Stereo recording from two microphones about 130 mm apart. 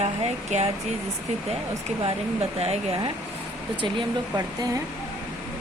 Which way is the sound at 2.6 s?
50° right (ahead or behind).